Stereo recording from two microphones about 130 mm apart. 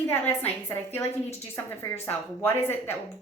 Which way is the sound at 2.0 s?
20° left (ahead or behind).